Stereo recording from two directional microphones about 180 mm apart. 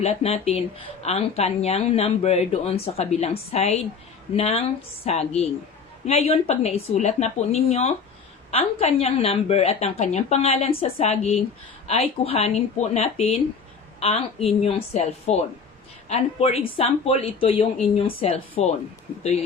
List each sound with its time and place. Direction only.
0.0 s a woman's voice: 35° left (ahead or behind)